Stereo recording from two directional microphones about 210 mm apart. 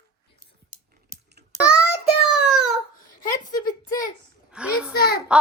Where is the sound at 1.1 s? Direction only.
35° right (ahead or behind).